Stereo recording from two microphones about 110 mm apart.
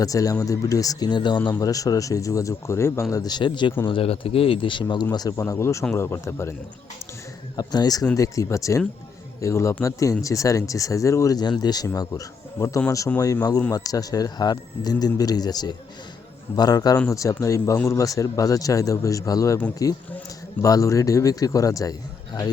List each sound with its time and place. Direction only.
0.0 s speech: 30° left (ahead or behind)
3.8 s speech: 55° left (ahead or behind)
5.1 s speech: 35° left (ahead or behind)
7.5 s speech: 40° left (ahead or behind)